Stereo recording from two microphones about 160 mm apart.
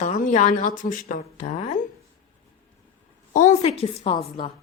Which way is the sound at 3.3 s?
50° left (ahead or behind).